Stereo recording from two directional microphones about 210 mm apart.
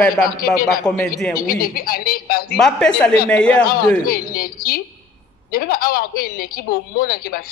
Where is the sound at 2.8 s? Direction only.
5° left (ahead or behind).